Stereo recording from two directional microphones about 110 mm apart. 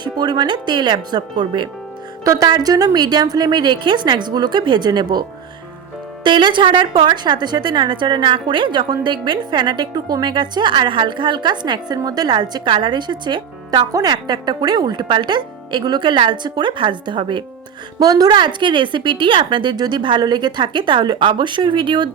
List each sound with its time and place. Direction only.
0.0 s a woman's voice: 40° right (ahead or behind)
6.2 s a woman's voice: 45° right (ahead or behind)